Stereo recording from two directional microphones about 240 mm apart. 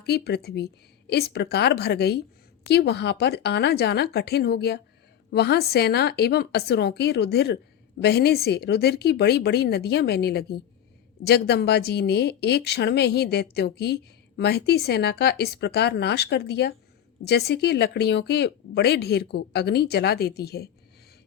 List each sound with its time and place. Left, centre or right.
0.0 s a woman's voice: left